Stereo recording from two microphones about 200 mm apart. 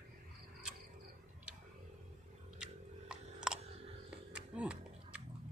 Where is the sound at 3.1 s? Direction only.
5° right (ahead or behind).